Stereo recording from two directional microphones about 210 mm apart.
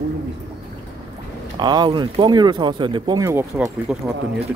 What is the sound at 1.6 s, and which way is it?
Speech, 20° right (ahead or behind).